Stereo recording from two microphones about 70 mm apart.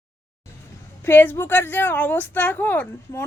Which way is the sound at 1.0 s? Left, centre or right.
Left.